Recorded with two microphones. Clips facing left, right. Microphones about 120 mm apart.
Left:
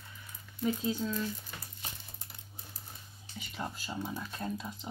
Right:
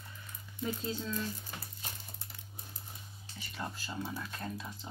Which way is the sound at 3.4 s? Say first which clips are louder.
Left 2 dB; 20° left (ahead or behind).